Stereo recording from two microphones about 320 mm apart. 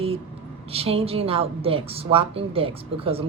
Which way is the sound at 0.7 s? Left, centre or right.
Centre.